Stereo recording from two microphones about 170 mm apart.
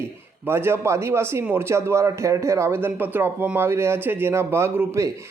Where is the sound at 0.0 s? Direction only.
15° right (ahead or behind).